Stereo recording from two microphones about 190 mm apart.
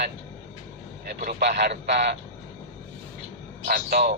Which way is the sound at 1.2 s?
55° right (ahead or behind).